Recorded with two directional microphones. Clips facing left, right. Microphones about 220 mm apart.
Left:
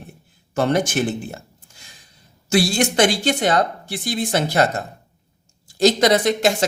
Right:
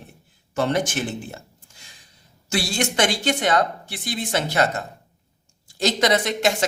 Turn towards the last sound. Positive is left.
turn(degrees=35)  # may be behind; listen again after turning